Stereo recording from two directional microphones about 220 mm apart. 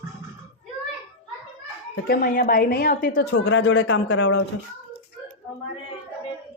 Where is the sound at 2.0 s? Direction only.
45° left (ahead or behind).